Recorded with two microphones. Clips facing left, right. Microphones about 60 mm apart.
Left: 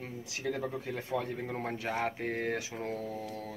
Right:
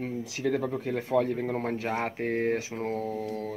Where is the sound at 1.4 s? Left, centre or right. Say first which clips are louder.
Right 6 dB; right.